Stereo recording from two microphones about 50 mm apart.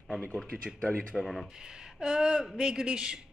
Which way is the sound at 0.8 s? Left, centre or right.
Left.